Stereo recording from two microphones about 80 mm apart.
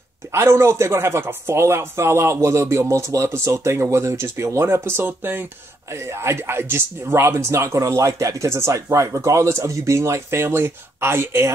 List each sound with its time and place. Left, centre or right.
0.3 s speech: right